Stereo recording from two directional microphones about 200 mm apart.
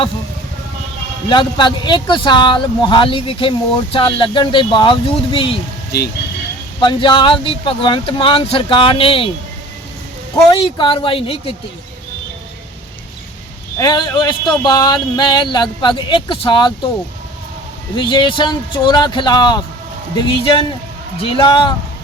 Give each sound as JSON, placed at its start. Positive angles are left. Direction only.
{"t": 1.3, "sound": "speech", "side_deg": 25}
{"t": 5.9, "sound": "speech", "side_deg": 55}
{"t": 6.7, "sound": "speech", "side_deg": 25}
{"t": 10.6, "sound": "speech", "side_deg": 25}
{"t": 13.7, "sound": "speech", "side_deg": 20}
{"t": 17.9, "sound": "speech", "side_deg": 25}